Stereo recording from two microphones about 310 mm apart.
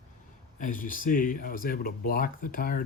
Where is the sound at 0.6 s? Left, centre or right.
Left.